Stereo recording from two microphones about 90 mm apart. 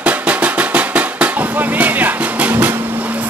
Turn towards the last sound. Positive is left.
turn(degrees=-20)  # may be behind; listen again after turning